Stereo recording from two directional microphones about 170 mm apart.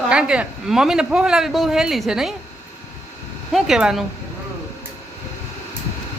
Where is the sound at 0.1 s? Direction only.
5° right (ahead or behind).